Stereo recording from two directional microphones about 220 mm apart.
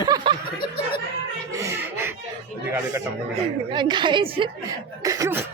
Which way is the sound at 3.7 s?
20° right (ahead or behind).